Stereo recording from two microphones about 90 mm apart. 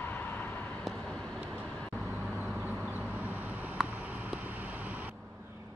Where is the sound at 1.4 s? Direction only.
20° right (ahead or behind).